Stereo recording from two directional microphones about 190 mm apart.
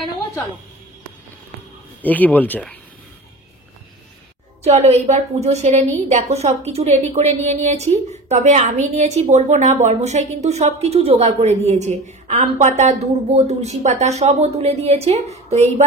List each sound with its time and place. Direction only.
2.0 s speech: 10° left (ahead or behind)
4.6 s a woman's voice: 35° right (ahead or behind)